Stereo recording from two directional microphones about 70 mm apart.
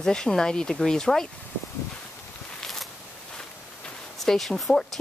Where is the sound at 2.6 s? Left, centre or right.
Centre.